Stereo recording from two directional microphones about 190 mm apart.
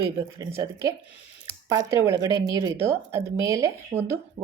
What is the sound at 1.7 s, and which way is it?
Speech, 20° right (ahead or behind).